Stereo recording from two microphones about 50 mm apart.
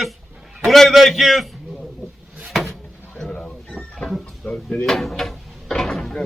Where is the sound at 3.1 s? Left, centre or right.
Centre.